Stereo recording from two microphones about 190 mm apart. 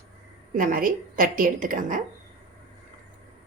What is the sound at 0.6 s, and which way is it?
A woman's voice, 45° right (ahead or behind).